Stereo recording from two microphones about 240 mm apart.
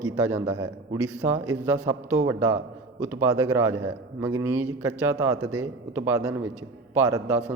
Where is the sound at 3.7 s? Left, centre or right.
Right.